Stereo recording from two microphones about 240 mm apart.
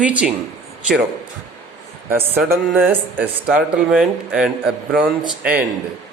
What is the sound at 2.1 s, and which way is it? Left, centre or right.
Speech, centre.